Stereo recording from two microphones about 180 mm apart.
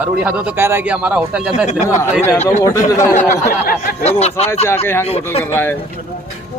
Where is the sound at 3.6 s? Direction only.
55° left (ahead or behind).